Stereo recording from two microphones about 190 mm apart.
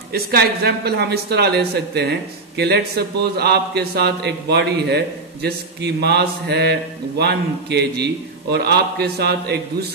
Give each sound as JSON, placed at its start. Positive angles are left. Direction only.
{"t": 0.1, "sound": "speech", "side_deg": -55}